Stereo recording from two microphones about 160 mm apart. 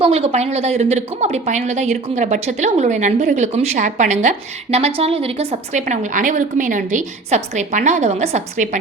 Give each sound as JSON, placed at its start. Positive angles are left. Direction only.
{"t": 0.0, "sound": "a woman's voice", "side_deg": -40}